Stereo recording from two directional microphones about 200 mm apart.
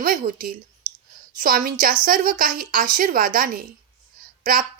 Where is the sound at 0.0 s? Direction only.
45° right (ahead or behind).